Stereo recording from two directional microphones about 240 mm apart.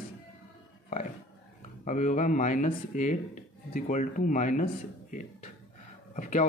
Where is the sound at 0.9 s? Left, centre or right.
Left.